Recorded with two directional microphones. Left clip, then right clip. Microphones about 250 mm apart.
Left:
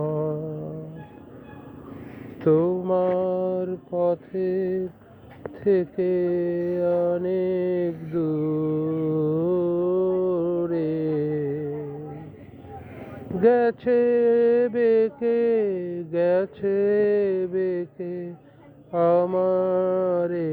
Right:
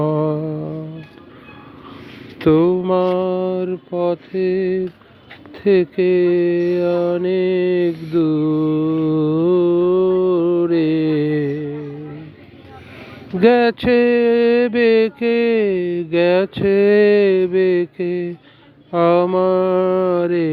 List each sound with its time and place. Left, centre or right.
0.0 s music: right
2.4 s mantra: right
13.4 s a sound: right
18.9 s speech: right